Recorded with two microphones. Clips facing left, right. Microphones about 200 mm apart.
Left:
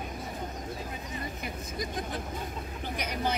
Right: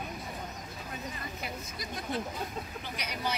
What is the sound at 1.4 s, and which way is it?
Speech, 50° left (ahead or behind).